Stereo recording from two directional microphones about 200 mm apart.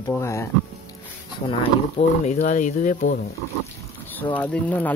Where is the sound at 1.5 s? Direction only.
35° left (ahead or behind).